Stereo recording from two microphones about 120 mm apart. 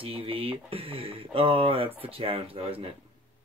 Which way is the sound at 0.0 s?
50° right (ahead or behind).